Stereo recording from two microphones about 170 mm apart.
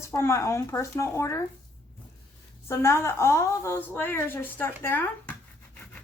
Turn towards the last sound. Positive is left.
turn(degrees=15)  # may be behind; listen again after turning